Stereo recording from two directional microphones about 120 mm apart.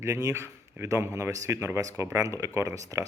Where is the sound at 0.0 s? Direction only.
25° right (ahead or behind).